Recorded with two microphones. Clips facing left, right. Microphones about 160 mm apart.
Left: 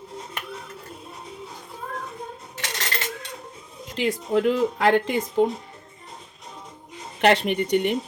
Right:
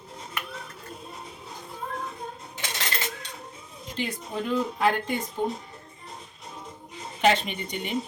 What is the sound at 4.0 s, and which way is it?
Speech, 90° left.